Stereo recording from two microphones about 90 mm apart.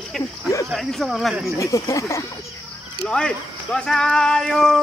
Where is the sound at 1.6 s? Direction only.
35° left (ahead or behind).